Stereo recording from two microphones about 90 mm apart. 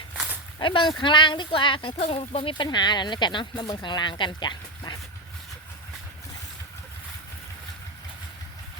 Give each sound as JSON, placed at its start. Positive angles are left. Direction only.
{"t": 0.6, "sound": "speech", "side_deg": 75}